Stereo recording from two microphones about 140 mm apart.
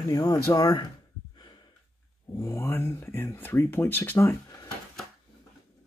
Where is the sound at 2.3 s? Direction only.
15° left (ahead or behind).